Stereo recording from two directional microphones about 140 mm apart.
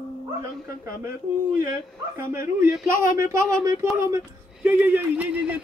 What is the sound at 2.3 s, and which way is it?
Speech, 20° right (ahead or behind).